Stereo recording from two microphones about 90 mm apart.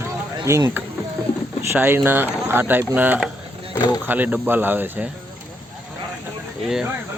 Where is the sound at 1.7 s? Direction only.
25° right (ahead or behind).